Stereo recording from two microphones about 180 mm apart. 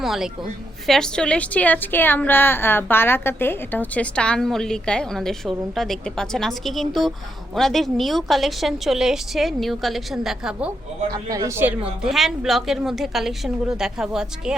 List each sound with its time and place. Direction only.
0.0 s a woman's voice: centre (ahead or behind)
11.1 s a man's voice: 20° right (ahead or behind)
12.0 s a woman's voice: centre (ahead or behind)